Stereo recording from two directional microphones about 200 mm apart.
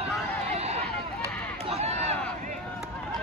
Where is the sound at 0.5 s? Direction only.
30° right (ahead or behind).